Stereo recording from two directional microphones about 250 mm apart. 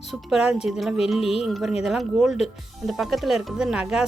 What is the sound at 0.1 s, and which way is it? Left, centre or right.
Speech, centre.